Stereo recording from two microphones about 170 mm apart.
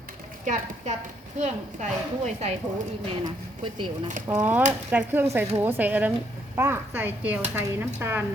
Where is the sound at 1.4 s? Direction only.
45° right (ahead or behind).